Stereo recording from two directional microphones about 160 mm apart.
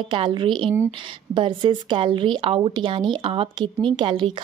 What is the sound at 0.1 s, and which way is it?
Speech, 30° right (ahead or behind).